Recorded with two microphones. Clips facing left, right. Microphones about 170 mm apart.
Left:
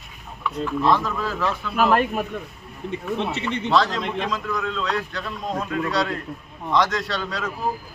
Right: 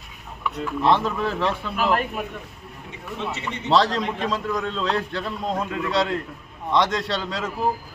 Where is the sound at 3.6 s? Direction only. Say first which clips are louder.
Right 2 dB; 35° right (ahead or behind).